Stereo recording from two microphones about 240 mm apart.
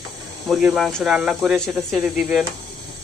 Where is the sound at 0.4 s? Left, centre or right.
Centre.